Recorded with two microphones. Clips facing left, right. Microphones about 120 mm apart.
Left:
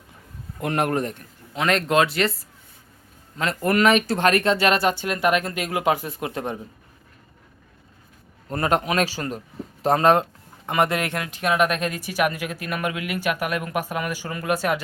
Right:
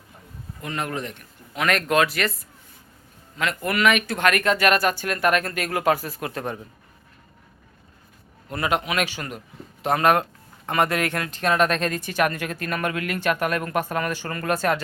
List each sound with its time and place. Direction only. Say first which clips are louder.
0.6 s speech: left 6 dB; 60° left (ahead or behind)
1.5 s speech: left 1 dB; 25° left (ahead or behind)
3.3 s speech: left 4 dB; 35° left (ahead or behind)
8.4 s a man's voice: left 2 dB; 40° left (ahead or behind); by 14.8 s 10° left (ahead or behind)